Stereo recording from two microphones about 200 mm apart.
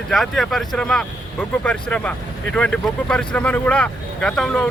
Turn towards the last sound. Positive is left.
turn(degrees=5)  # may be behind; listen again after turning